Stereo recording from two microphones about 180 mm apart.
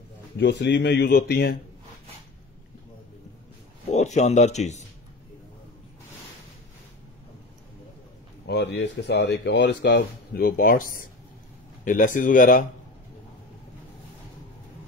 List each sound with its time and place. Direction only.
0.4 s speech: 70° left (ahead or behind)
3.9 s speech: 40° left (ahead or behind)
8.5 s speech: 70° left (ahead or behind); by 12.6 s 50° left (ahead or behind)